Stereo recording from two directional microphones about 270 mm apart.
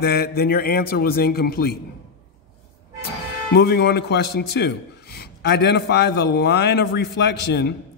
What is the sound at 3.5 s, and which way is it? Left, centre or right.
A man's voice, left.